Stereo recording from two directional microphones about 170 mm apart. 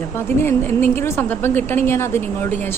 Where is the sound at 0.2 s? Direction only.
15° left (ahead or behind).